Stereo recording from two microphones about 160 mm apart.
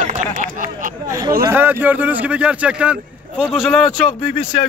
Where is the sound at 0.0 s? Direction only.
55° right (ahead or behind).